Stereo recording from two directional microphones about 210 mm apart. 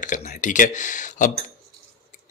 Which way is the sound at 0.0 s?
35° left (ahead or behind).